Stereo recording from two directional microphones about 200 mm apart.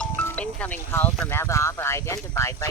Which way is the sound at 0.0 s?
5° left (ahead or behind).